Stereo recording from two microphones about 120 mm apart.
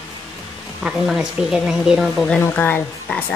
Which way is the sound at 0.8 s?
5° right (ahead or behind).